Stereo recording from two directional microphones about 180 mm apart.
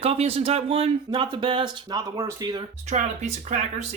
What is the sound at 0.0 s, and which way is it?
Speech, 35° right (ahead or behind).